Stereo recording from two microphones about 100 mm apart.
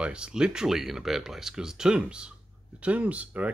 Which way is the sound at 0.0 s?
10° right (ahead or behind).